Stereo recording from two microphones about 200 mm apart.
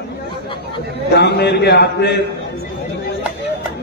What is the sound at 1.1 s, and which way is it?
A man's voice, 55° left (ahead or behind).